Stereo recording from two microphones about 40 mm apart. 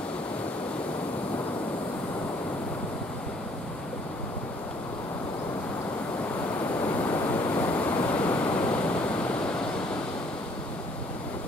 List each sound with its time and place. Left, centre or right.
7.0 s waves: left